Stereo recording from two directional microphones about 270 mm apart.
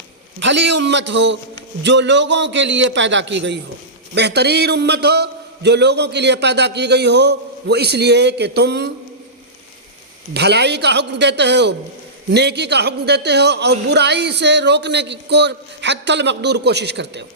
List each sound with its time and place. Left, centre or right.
0.3 s speech: right
10.3 s speech: right